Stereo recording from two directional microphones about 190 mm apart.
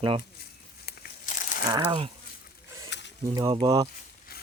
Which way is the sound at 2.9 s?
65° left (ahead or behind).